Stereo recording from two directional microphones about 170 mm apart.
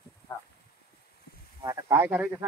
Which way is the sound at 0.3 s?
25° left (ahead or behind).